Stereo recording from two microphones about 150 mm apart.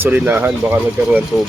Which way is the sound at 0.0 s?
15° right (ahead or behind).